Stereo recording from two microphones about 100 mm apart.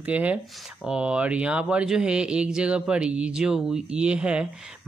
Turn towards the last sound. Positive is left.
turn(degrees=-10)  # may be behind; listen again after turning